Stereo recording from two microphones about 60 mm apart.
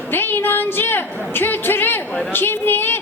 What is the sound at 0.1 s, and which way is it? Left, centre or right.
A woman's voice, left.